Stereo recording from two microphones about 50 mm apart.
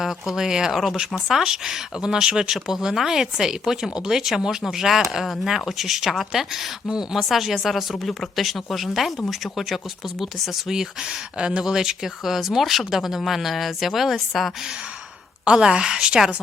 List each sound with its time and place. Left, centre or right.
0.0 s speech: centre
15.4 s speech: centre